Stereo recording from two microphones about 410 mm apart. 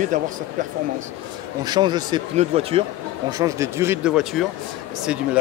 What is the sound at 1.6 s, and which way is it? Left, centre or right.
Speech, centre.